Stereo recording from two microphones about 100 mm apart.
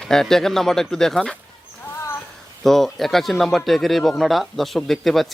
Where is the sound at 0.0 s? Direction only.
5° left (ahead or behind).